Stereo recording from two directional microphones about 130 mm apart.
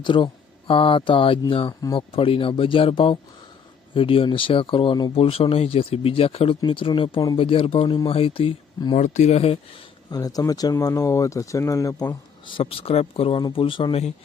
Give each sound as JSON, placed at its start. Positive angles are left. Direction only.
{"t": 0.0, "sound": "speech", "side_deg": 40}
{"t": 5.1, "sound": "speech", "side_deg": 45}
{"t": 9.0, "sound": "speech", "side_deg": 65}
{"t": 10.1, "sound": "speech", "side_deg": 30}